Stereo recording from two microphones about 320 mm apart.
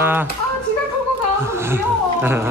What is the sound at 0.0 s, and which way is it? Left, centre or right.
Speech, centre.